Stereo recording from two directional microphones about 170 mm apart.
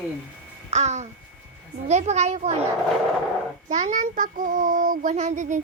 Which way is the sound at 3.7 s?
50° right (ahead or behind).